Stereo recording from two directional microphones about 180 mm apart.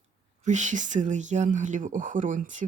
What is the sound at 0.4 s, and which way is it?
Speech, 40° right (ahead or behind).